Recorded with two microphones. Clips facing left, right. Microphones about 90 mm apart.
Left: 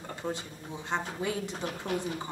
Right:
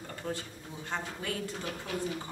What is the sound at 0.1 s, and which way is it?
Speech, 20° left (ahead or behind).